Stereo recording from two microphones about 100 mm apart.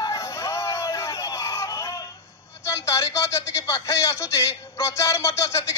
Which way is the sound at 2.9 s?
30° left (ahead or behind).